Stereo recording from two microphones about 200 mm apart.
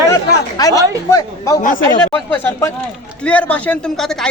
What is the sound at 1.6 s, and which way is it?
Speech, 40° left (ahead or behind).